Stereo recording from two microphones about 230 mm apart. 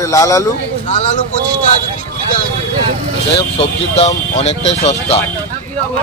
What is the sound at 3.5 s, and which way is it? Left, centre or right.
Speech, left.